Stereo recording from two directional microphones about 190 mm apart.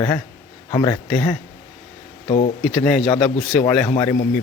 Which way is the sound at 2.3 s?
35° left (ahead or behind).